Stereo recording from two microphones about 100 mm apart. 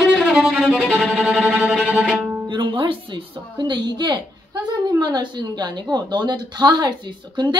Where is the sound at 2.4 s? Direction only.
55° right (ahead or behind).